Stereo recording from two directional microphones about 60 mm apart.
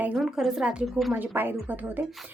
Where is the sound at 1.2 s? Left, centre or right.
Right.